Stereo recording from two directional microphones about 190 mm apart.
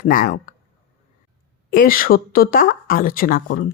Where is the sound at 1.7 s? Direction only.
50° left (ahead or behind).